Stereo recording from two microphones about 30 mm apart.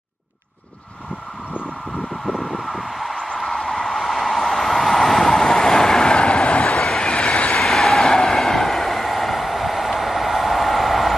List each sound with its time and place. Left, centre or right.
2.2 s vehicle: centre
3.3 s a sound: centre
4.0 s vehicle: centre
6.1 s train: left
7.6 s vehicle: centre
8.0 s vehicle: left; by 11.1 s centre